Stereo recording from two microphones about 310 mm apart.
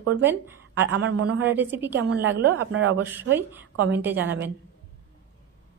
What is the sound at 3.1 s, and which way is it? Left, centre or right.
Speech, centre.